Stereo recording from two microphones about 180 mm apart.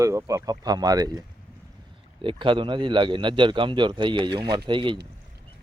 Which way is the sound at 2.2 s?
30° right (ahead or behind).